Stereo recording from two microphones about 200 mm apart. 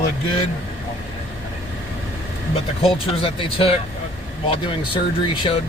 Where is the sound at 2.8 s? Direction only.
25° left (ahead or behind).